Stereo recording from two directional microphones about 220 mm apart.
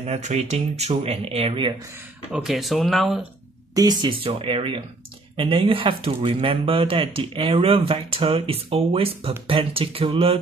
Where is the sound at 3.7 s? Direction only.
20° right (ahead or behind).